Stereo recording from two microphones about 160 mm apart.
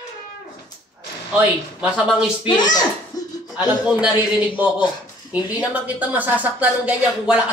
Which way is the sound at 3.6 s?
5° right (ahead or behind).